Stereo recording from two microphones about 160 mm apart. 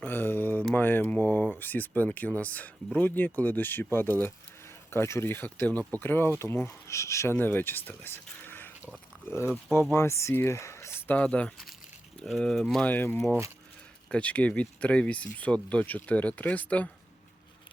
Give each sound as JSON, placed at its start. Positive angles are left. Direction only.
{"t": 0.0, "sound": "mantra", "side_deg": 15}
{"t": 0.7, "sound": "speech", "side_deg": 10}
{"t": 9.9, "sound": "speech", "side_deg": 15}